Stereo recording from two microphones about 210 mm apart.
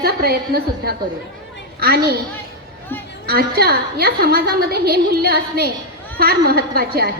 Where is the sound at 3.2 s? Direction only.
45° right (ahead or behind).